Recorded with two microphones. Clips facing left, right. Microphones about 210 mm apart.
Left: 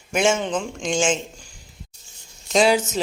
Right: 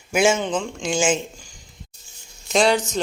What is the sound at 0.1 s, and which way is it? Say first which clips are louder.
Speech: right 1 dB; 5° right (ahead or behind).